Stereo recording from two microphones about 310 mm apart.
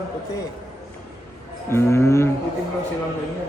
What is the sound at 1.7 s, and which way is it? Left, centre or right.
Speech, centre.